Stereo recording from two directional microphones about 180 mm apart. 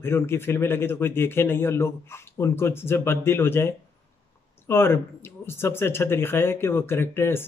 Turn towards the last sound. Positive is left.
turn(degrees=15)  # may be behind; listen again after turning